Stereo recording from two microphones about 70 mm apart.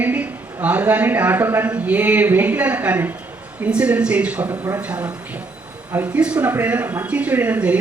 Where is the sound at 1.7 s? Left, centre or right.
Right.